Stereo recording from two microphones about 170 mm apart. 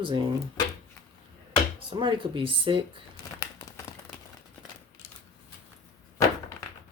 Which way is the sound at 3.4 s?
20° left (ahead or behind).